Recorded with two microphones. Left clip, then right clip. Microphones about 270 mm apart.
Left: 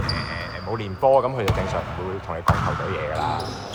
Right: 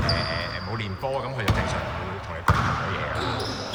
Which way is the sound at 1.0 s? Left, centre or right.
Centre.